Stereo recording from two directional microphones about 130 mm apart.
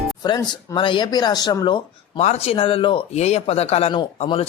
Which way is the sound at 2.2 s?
55° left (ahead or behind).